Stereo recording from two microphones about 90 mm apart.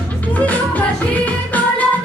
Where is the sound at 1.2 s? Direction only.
15° left (ahead or behind).